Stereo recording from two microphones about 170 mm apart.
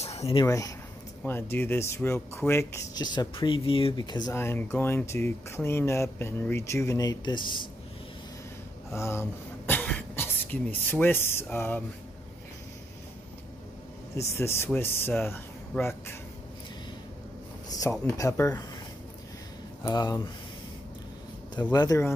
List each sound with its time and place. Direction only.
0.0 s a sound: 40° left (ahead or behind)
0.4 s speech: 20° left (ahead or behind)
8.9 s speech: 15° left (ahead or behind)
14.3 s speech: 15° left (ahead or behind)
17.6 s a sound: 20° left (ahead or behind)
18.0 s speech: 15° left (ahead or behind)
19.8 s speech: 25° left (ahead or behind)
21.7 s speech: 20° left (ahead or behind)